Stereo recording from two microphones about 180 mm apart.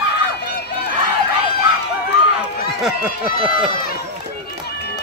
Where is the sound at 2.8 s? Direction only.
5° right (ahead or behind).